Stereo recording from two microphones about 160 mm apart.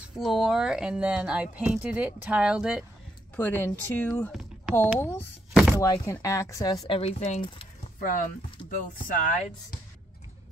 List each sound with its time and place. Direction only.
0.0 s speech: 5° right (ahead or behind)
3.3 s speech: 10° left (ahead or behind)
4.3 s a sound: centre (ahead or behind)
5.0 s speech: 15° left (ahead or behind)
5.5 s chopping: 5° right (ahead or behind)
5.8 s a woman's voice: 20° left (ahead or behind)
6.9 s speech: 40° left (ahead or behind)
8.6 s speech: 55° left (ahead or behind)